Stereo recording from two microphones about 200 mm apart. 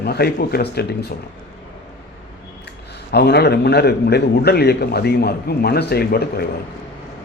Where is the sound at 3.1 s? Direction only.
55° left (ahead or behind).